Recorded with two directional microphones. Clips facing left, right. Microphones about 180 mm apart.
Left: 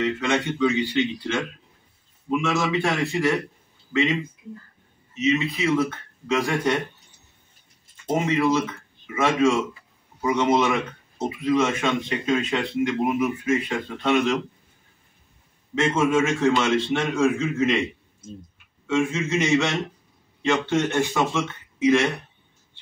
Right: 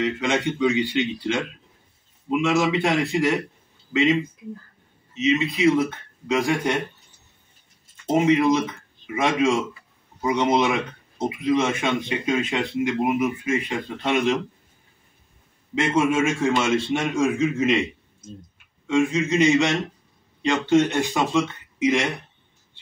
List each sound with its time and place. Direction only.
0.0 s speech: 15° right (ahead or behind)
2.4 s speech: 15° right (ahead or behind)
5.1 s speech: 15° right (ahead or behind)
8.1 s speech: 15° right (ahead or behind)
15.7 s speech: 15° right (ahead or behind)
18.9 s speech: 15° right (ahead or behind)